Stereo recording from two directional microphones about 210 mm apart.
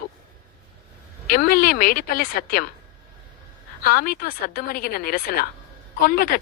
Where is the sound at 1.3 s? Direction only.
45° left (ahead or behind).